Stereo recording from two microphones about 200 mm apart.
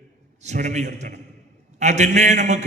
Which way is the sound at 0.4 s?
35° right (ahead or behind).